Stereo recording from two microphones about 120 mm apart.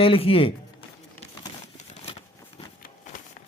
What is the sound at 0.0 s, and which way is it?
Speech, 50° left (ahead or behind).